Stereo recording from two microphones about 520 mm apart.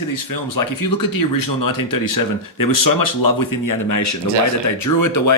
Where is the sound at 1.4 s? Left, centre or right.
Left.